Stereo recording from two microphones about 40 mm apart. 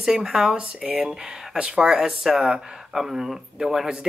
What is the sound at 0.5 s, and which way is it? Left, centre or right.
Speech, right.